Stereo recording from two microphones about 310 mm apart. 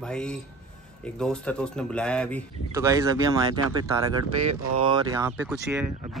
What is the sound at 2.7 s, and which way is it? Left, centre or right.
Speech, centre.